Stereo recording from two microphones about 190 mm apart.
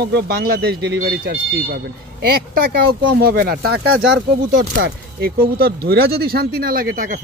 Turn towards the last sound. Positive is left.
turn(degrees=-50)  # may be behind; listen again after turning